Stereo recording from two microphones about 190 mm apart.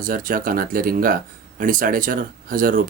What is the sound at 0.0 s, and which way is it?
Speech, 45° right (ahead or behind).